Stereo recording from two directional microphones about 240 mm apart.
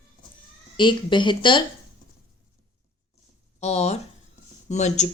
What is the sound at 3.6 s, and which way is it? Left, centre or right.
Speech, left.